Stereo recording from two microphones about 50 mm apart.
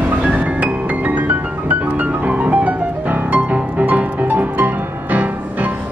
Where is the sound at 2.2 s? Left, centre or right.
Right.